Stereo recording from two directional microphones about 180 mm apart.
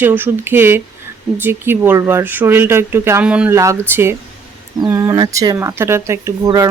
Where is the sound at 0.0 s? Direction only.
10° right (ahead or behind).